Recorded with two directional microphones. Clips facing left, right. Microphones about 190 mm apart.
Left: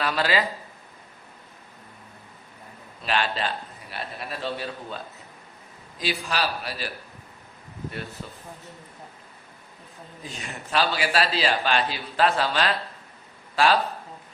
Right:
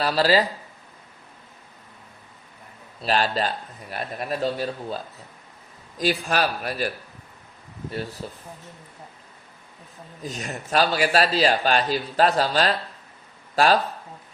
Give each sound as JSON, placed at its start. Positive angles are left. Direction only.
{"t": 0.0, "sound": "speech", "side_deg": -35}
{"t": 3.0, "sound": "a man's voice", "side_deg": -40}
{"t": 8.2, "sound": "a man's voice", "side_deg": -35}
{"t": 10.2, "sound": "a man's voice", "side_deg": -40}